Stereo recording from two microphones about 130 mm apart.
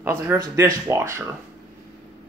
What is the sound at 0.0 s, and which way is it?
Speech, 20° right (ahead or behind).